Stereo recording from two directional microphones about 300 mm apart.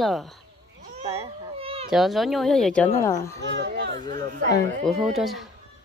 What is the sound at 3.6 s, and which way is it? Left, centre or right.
Children playing, right.